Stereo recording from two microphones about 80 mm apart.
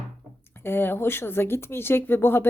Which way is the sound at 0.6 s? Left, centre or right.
Left.